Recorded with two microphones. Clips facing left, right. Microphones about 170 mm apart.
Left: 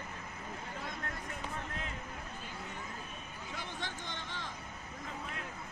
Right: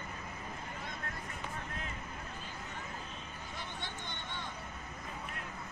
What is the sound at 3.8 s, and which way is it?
Vehicle, 90° left.